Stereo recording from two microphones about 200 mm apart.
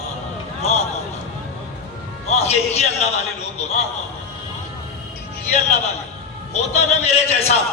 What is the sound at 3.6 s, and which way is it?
Speech, 35° left (ahead or behind).